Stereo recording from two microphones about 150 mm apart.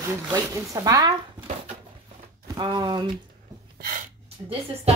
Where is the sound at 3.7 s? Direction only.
80° right.